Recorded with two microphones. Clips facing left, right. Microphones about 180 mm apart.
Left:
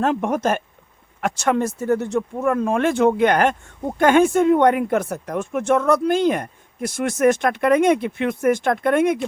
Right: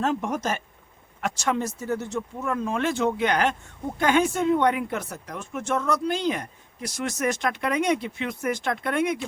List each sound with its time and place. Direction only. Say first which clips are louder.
0.0 s speech: left 6 dB; 60° left (ahead or behind)